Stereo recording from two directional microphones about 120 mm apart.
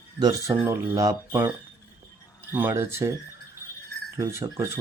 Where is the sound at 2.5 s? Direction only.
20° right (ahead or behind).